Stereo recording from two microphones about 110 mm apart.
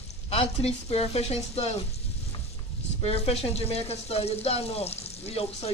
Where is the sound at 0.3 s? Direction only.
65° left (ahead or behind).